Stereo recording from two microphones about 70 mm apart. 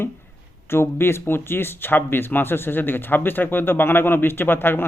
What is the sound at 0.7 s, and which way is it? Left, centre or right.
Speech, left.